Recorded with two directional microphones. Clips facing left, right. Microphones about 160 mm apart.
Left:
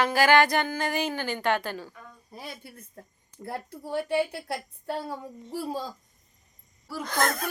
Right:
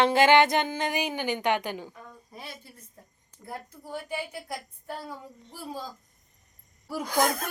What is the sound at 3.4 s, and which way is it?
A woman's voice, 75° left (ahead or behind).